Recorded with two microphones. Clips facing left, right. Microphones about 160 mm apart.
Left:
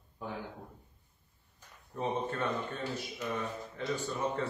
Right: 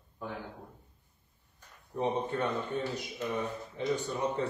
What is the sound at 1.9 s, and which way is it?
A man's voice, 15° right (ahead or behind).